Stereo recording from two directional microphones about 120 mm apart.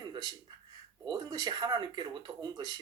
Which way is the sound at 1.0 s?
35° right (ahead or behind).